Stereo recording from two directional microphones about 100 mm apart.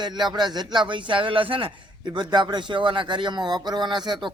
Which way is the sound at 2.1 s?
50° right (ahead or behind).